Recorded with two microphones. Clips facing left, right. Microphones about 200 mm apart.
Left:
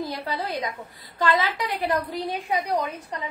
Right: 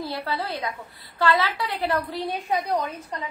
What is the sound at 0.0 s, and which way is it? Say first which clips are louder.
A woman's voice: even; 15° left (ahead or behind).